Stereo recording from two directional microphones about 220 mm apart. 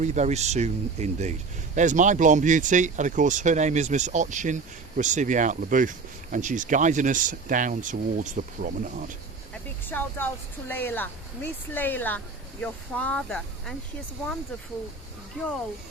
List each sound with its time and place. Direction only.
0.0 s speech: 30° right (ahead or behind)
9.8 s speech: 10° left (ahead or behind)